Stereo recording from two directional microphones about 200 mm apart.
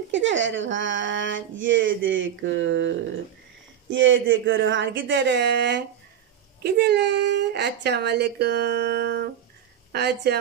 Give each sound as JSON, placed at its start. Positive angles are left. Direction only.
{"t": 0.1, "sound": "speech", "side_deg": -65}